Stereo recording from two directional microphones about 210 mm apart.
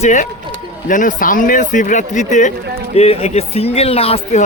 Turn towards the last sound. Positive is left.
turn(degrees=30)  # may be behind; listen again after turning